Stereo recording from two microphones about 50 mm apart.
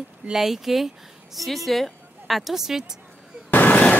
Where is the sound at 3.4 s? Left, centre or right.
Left.